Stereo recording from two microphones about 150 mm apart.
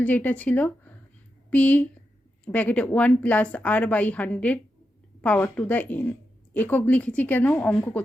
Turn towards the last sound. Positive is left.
turn(degrees=10)  # may be behind; listen again after turning